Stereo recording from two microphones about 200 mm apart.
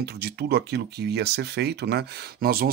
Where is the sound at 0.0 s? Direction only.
55° right (ahead or behind).